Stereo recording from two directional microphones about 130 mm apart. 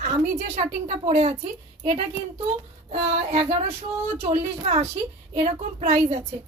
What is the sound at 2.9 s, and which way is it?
A woman's voice, 50° right (ahead or behind).